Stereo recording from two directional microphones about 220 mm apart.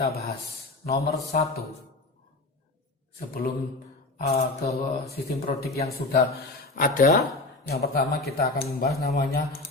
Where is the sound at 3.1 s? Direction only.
40° left (ahead or behind).